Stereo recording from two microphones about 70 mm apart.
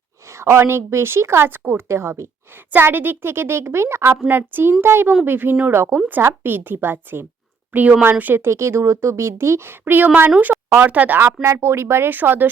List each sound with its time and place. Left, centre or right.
0.4 s speech: right
2.7 s a woman's voice: right
8.4 s speech: right